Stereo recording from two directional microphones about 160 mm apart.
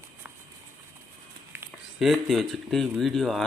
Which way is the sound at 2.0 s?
Centre (ahead or behind).